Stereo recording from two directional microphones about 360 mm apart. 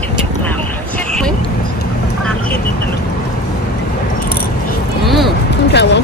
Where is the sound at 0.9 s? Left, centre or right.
Centre.